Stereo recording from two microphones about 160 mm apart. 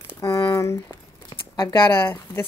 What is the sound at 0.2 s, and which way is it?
Crumpling, 20° left (ahead or behind).